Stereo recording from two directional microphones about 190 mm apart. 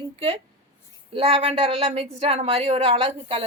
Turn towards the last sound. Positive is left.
turn(degrees=-30)  # may be behind; listen again after turning